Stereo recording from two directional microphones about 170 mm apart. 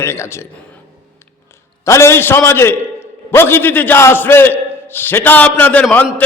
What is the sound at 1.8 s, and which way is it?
A man's voice, 15° left (ahead or behind).